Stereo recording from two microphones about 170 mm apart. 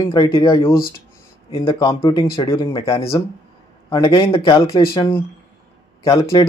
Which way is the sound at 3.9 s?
30° left (ahead or behind).